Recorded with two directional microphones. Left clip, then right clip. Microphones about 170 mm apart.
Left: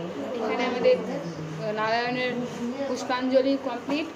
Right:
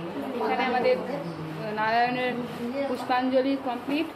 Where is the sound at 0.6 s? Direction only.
10° left (ahead or behind).